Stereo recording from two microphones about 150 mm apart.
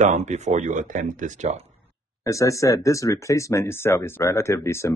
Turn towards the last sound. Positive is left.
turn(degrees=20)  # may be behind; listen again after turning